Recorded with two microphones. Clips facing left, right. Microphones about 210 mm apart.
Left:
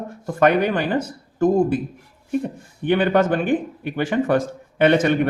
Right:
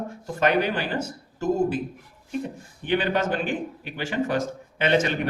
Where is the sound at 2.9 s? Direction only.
55° left (ahead or behind).